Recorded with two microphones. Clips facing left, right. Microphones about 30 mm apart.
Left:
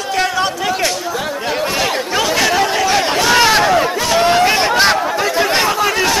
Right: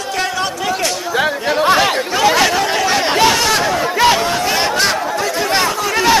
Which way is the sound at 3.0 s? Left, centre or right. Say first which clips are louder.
Right 2 dB; centre.